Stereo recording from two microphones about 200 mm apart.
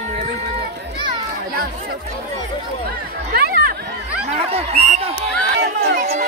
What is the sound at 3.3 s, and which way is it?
Chatter, 50° right (ahead or behind).